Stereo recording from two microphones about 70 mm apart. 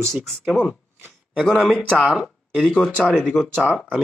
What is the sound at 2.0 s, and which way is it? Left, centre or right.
Speech, centre.